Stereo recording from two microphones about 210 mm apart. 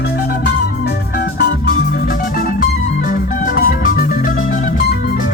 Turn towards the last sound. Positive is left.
turn(degrees=45)  # may be behind; listen again after turning